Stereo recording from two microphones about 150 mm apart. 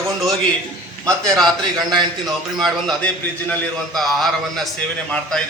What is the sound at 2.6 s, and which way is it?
A man's voice, centre (ahead or behind).